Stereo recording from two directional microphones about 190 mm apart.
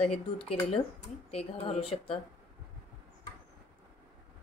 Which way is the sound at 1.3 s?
30° left (ahead or behind).